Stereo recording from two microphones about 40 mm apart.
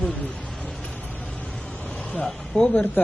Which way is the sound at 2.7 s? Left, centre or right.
Left.